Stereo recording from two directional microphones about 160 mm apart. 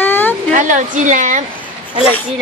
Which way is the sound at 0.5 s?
55° right (ahead or behind).